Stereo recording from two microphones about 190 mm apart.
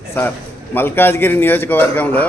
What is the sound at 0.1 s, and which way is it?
A man's voice, 10° left (ahead or behind).